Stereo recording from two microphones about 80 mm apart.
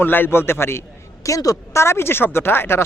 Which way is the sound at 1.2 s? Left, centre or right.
Left.